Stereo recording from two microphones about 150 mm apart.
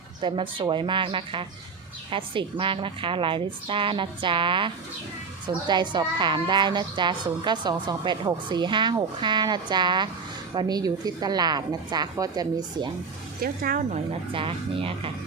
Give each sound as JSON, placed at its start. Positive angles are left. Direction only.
{"t": 0.2, "sound": "a woman's voice", "side_deg": -35}
{"t": 13.4, "sound": "speech", "side_deg": -70}
{"t": 14.3, "sound": "a woman's voice", "side_deg": -35}